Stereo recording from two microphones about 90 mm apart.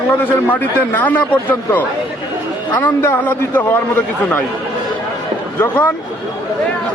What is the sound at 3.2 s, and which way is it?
A man's voice, 20° left (ahead or behind).